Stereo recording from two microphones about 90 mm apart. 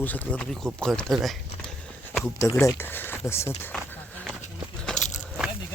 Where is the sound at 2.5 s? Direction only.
25° left (ahead or behind).